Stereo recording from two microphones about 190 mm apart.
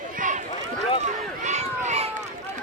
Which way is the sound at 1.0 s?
40° right (ahead or behind).